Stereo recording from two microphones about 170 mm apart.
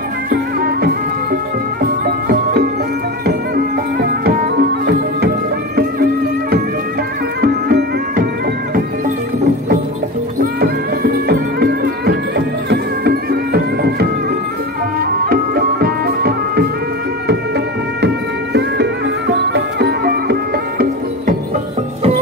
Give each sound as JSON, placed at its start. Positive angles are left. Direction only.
{"t": 0.3, "sound": "music", "side_deg": -60}
{"t": 7.4, "sound": "music", "side_deg": -65}
{"t": 10.4, "sound": "music", "side_deg": -65}
{"t": 18.0, "sound": "music", "side_deg": -80}